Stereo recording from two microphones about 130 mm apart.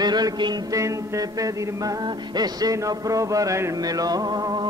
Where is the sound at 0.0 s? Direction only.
30° right (ahead or behind).